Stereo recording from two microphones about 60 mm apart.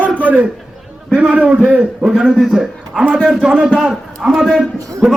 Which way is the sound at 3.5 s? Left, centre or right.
Right.